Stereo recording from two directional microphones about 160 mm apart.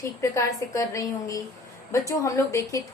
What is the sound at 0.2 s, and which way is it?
A woman's voice, 20° left (ahead or behind).